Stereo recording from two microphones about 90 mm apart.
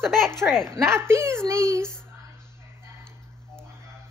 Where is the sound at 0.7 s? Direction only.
30° right (ahead or behind).